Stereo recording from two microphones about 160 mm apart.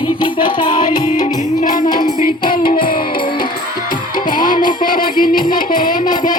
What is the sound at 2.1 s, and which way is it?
Music, 65° left (ahead or behind).